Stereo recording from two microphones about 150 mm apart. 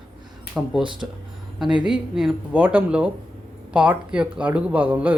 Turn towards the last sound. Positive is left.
turn(degrees=-10)  # may be behind; listen again after turning